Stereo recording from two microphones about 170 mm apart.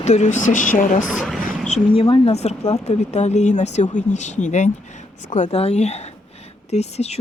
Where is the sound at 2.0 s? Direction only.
35° left (ahead or behind).